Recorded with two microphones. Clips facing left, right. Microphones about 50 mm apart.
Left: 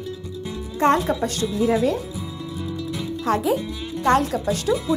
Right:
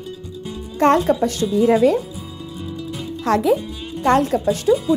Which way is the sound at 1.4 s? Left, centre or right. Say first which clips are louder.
Right 6 dB; centre.